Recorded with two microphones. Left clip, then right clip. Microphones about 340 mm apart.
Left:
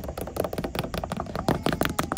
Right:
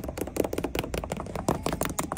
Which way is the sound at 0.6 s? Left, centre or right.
Centre.